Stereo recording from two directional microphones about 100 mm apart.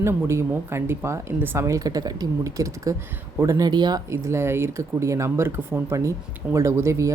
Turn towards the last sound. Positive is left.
turn(degrees=-30)  # may be behind; listen again after turning